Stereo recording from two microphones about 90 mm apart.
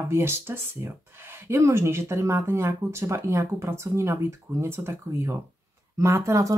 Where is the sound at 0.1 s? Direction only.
25° right (ahead or behind).